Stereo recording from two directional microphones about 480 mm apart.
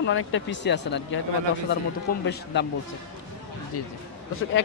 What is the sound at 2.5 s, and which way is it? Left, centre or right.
Speech, left.